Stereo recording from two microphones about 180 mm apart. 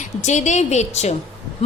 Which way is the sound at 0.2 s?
40° left (ahead or behind).